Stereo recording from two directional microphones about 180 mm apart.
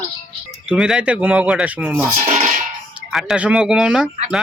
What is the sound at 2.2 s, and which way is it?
Speech, 40° right (ahead or behind).